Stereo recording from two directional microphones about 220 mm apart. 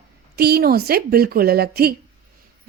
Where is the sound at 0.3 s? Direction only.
45° right (ahead or behind).